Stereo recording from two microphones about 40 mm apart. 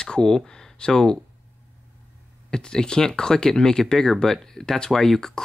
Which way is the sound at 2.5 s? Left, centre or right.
Centre.